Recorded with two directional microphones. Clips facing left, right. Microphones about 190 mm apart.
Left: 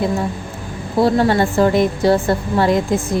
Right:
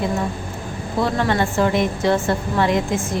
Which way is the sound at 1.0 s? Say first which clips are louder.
Left 6 dB; 35° left (ahead or behind).